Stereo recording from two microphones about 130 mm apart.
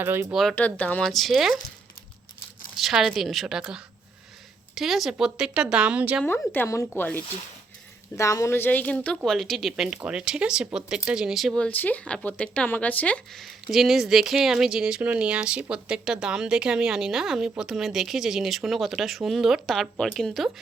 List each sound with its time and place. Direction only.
0.0 s speech: 15° right (ahead or behind)
0.5 s speech: 10° left (ahead or behind)
1.0 s speech: centre (ahead or behind)
2.7 s speech: 5° right (ahead or behind)
6.5 s speech: 20° left (ahead or behind)
8.1 s speech: 25° left (ahead or behind); by 11.5 s 5° right (ahead or behind)
11.5 s speech: 10° left (ahead or behind)